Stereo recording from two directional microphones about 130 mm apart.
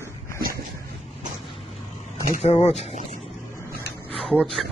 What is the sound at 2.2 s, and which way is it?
Speech, 65° left (ahead or behind).